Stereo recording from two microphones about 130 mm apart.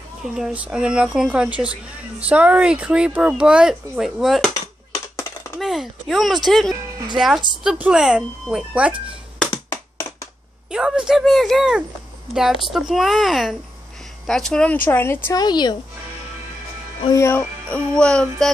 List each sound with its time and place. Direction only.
0.4 s speech: 5° right (ahead or behind)
5.6 s speech: centre (ahead or behind)
9.5 s a sound: 20° left (ahead or behind)
10.7 s speech: 5° right (ahead or behind)
14.9 s music: 15° left (ahead or behind)
15.3 s speech: 35° left (ahead or behind)
17.1 s music: 20° left (ahead or behind)